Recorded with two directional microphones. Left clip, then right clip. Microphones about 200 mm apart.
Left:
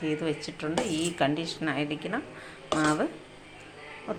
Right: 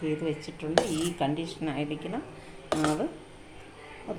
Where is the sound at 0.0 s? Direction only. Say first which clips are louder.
Left 1 dB; centre (ahead or behind).